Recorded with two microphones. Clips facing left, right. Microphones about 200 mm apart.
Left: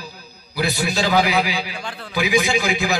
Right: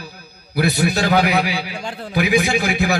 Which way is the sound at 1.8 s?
45° right (ahead or behind).